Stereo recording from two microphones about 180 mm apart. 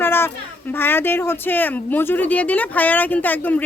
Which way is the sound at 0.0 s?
10° left (ahead or behind).